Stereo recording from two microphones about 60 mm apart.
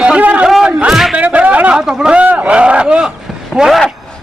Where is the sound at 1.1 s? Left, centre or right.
Right.